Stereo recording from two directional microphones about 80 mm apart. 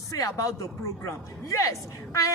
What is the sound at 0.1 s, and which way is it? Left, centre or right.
Speech, left.